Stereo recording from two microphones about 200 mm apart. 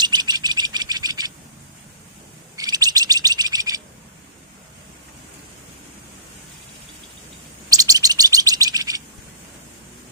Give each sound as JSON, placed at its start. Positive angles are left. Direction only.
{"t": 0.0, "sound": "bird", "side_deg": -20}
{"t": 2.6, "sound": "bird", "side_deg": -20}
{"t": 7.7, "sound": "chirp", "side_deg": -15}